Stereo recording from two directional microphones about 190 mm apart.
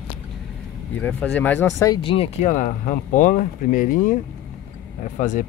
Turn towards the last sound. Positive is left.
turn(degrees=40)  # may be behind; listen again after turning